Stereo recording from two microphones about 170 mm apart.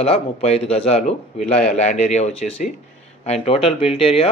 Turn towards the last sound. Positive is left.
turn(degrees=35)  # may be behind; listen again after turning